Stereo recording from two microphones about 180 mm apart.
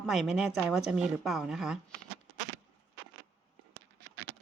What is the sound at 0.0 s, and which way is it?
Speech, centre (ahead or behind).